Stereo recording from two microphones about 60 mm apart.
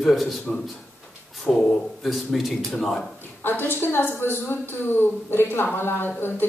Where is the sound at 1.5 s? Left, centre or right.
Centre.